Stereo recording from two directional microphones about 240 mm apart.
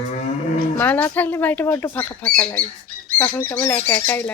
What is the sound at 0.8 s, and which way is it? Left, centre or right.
Speech, centre.